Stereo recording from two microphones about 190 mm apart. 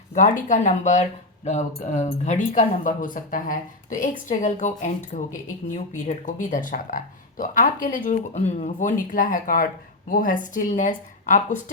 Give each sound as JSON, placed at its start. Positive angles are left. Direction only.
{"t": 0.1, "sound": "speech", "side_deg": 40}